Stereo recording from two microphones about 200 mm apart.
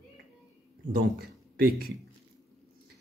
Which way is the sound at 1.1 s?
50° right (ahead or behind).